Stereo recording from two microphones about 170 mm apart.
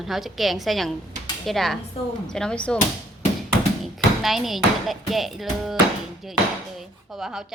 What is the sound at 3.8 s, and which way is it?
Speech, centre (ahead or behind).